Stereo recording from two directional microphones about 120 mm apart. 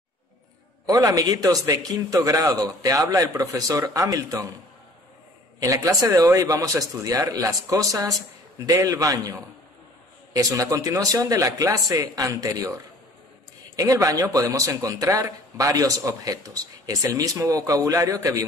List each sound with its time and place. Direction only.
0.8 s a man's voice: 30° right (ahead or behind)
5.6 s speech: 30° right (ahead or behind)